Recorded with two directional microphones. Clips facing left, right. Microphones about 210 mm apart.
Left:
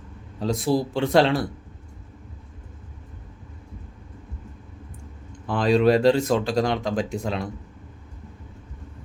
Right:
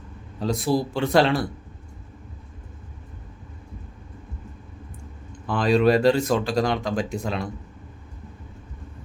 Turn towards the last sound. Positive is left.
turn(degrees=25)  # may be behind; listen again after turning